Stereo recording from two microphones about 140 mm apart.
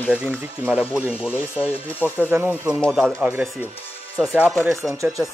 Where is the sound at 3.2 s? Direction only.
15° right (ahead or behind).